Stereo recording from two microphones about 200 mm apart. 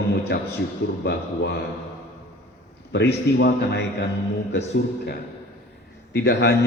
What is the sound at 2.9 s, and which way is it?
A man's voice, 55° left (ahead or behind).